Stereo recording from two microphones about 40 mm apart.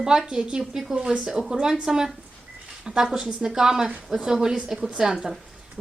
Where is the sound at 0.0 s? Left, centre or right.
Centre.